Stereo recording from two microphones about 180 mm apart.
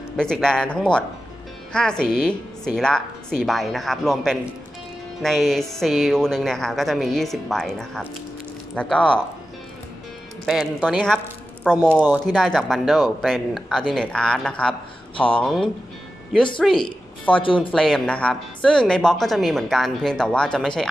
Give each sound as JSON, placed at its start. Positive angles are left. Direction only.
{"t": 0.2, "sound": "speech", "side_deg": 5}
{"t": 10.4, "sound": "speech", "side_deg": -5}
{"t": 14.7, "sound": "speech", "side_deg": 30}
{"t": 15.4, "sound": "speech", "side_deg": 0}
{"t": 17.4, "sound": "speech", "side_deg": 30}
{"t": 17.7, "sound": "speech", "side_deg": 0}